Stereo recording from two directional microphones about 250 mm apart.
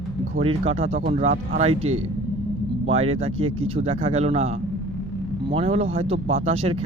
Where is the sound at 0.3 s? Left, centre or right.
Right.